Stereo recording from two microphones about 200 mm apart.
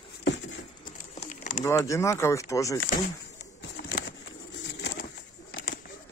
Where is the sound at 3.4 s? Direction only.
65° left (ahead or behind).